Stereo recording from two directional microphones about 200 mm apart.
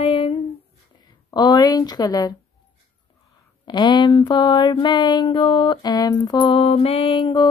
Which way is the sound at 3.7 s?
20° left (ahead or behind).